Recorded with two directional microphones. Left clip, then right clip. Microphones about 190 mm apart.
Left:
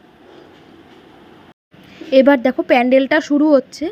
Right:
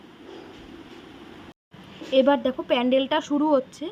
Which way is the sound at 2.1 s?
20° left (ahead or behind).